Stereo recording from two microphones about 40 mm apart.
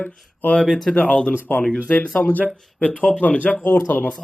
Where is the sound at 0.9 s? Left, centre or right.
Left.